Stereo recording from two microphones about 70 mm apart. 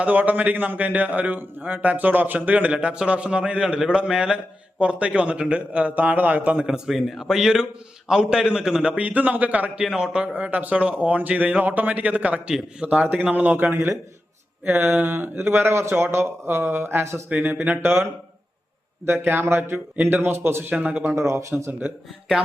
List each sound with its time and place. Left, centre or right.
0.0 s a man's voice: right
9.7 s a man's voice: centre; by 13.7 s right
13.7 s speech: right
14.6 s a sound: right
15.0 s speech: right
17.2 s a man's voice: right
20.7 s a man's voice: centre
21.2 s speech: right
21.7 s a man's voice: right